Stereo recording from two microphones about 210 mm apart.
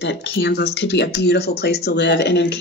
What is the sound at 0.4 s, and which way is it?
Speech, 55° left (ahead or behind).